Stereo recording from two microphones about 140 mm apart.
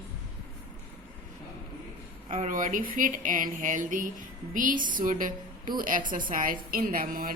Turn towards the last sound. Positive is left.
turn(degrees=-90)